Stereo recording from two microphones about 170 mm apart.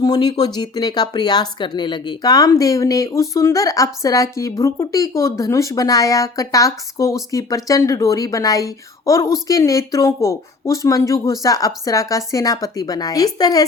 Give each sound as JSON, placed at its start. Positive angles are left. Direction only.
{"t": 0.0, "sound": "speech", "side_deg": 25}